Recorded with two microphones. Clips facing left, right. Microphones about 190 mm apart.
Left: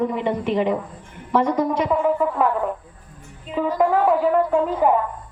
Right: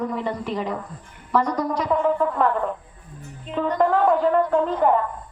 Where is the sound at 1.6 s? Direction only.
25° left (ahead or behind).